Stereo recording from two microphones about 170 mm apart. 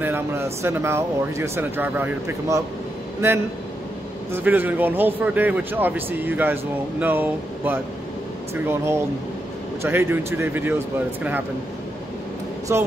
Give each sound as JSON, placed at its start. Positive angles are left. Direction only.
{"t": 0.0, "sound": "a man's voice", "side_deg": -15}
{"t": 4.3, "sound": "a man's voice", "side_deg": -10}
{"t": 12.7, "sound": "a man's voice", "side_deg": -15}